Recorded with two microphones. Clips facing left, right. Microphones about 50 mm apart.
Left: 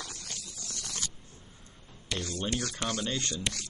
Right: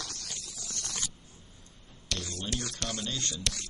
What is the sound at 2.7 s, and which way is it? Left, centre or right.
Speech, centre.